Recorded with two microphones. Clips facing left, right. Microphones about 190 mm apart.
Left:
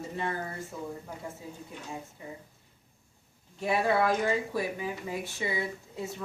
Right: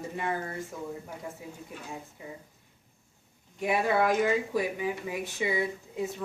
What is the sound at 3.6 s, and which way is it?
Speech, 15° right (ahead or behind).